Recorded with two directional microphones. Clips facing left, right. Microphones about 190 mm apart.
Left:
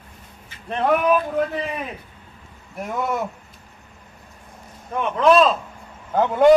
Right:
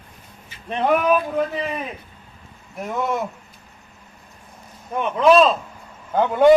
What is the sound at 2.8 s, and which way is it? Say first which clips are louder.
Speech: right 1 dB; 5° left (ahead or behind).